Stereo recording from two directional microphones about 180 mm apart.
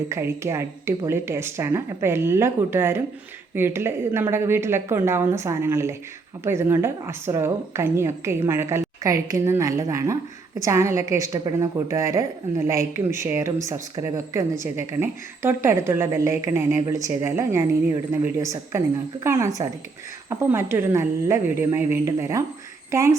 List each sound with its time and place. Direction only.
0.1 s a woman's voice: 15° right (ahead or behind)